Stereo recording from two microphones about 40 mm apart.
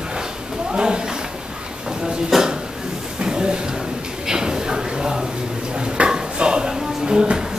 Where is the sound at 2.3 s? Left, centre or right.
Centre.